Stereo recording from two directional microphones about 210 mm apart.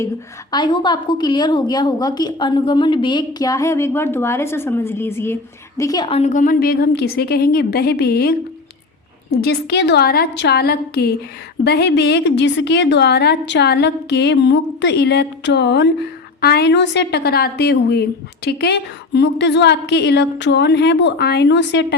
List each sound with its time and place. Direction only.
0.5 s a woman's voice: 20° left (ahead or behind); by 21.9 s 55° left (ahead or behind)